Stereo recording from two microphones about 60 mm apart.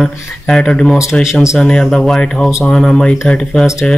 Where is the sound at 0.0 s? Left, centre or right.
Centre.